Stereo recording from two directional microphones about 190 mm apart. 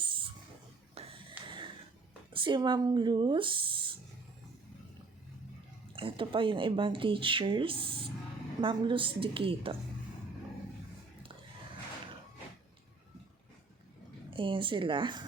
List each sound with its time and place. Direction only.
0.0 s a sound: 25° right (ahead or behind)
0.9 s wheeze: 30° right (ahead or behind)
2.3 s speech: 25° right (ahead or behind)
5.9 s speech: 25° right (ahead or behind)
14.3 s speech: 25° right (ahead or behind)